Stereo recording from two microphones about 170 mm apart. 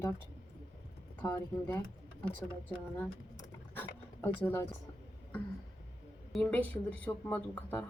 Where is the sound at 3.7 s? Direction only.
10° left (ahead or behind).